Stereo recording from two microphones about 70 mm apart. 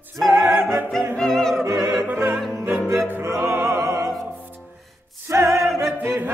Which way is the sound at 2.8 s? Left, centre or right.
Right.